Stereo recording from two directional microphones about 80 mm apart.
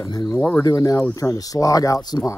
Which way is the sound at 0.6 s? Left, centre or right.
Left.